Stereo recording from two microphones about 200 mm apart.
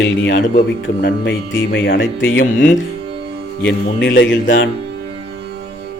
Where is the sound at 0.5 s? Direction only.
55° left (ahead or behind).